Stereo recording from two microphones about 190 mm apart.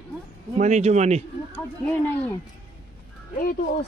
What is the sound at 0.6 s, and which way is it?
Speech, 35° right (ahead or behind).